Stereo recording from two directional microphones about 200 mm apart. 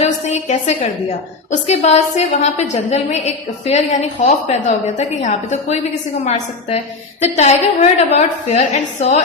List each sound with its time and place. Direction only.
0.0 s a woman's voice: 35° left (ahead or behind)